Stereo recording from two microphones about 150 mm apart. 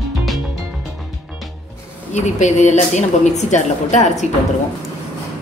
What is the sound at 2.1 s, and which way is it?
Speech, 50° left (ahead or behind).